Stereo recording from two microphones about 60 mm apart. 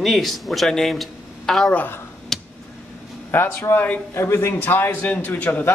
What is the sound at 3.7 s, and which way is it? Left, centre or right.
Speech, left.